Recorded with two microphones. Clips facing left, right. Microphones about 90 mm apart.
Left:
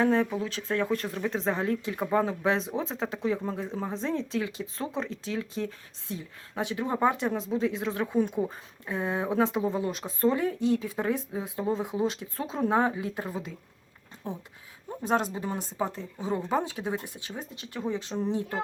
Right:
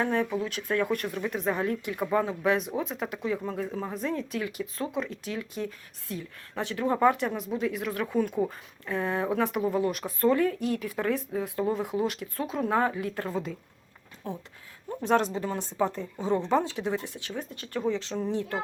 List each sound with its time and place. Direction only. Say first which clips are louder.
0.0 s speech: left 2 dB; 30° left (ahead or behind)
13.2 s speech: right 4 dB; 5° left (ahead or behind)
14.3 s speech: even; 20° left (ahead or behind)
14.8 s speech: right 2 dB; 10° left (ahead or behind)
15.8 s speech: right 5 dB; centre (ahead or behind)
16.8 s speech: right 2 dB; 20° left (ahead or behind)